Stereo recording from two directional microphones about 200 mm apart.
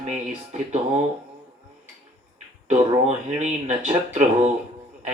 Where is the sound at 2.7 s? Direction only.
35° right (ahead or behind).